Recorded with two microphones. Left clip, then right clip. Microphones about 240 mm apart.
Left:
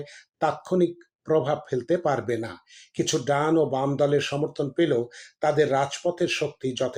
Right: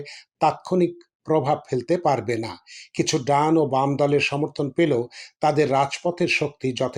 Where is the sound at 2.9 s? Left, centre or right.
Right.